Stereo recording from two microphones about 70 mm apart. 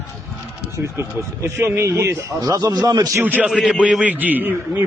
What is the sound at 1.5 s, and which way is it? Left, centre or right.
Speech, right.